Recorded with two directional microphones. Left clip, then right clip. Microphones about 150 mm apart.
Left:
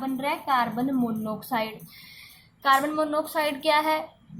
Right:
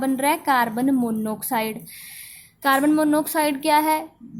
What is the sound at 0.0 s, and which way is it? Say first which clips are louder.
A woman's voice: right 7 dB; 70° right (ahead or behind).